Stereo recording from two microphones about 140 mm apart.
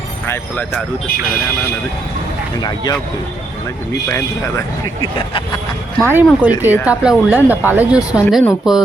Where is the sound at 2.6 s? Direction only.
30° left (ahead or behind).